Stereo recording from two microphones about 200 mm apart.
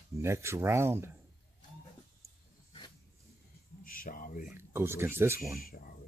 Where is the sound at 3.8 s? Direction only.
45° left (ahead or behind).